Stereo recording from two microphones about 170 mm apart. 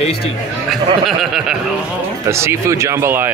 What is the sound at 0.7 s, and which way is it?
Speech, centre (ahead or behind).